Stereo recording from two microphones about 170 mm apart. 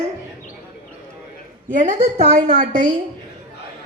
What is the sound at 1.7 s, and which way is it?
A woman's voice, 50° right (ahead or behind).